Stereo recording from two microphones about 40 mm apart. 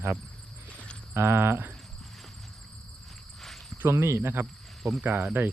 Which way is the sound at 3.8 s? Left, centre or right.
Right.